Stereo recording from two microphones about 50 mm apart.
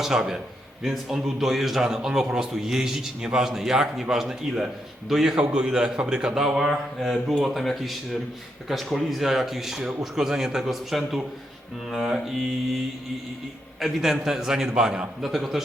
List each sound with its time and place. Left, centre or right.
0.0 s a man's voice: centre
13.7 s a man's voice: centre